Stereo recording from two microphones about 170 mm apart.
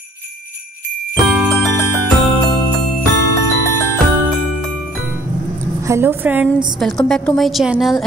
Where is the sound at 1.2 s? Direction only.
5° right (ahead or behind).